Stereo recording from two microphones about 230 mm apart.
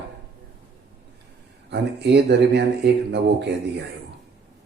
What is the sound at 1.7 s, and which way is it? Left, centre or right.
Speech, right.